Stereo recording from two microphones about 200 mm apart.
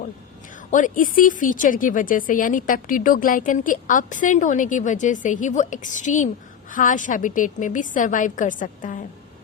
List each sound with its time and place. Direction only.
0.7 s a woman's voice: 40° left (ahead or behind)